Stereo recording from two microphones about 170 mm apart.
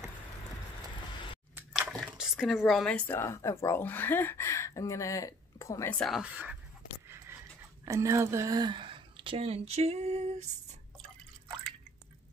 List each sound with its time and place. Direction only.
1.9 s squish: centre (ahead or behind)
3.1 s speech: 15° left (ahead or behind)
5.9 s speech: centre (ahead or behind)
7.8 s a woman's voice: 15° right (ahead or behind); by 10.3 s 40° right (ahead or behind)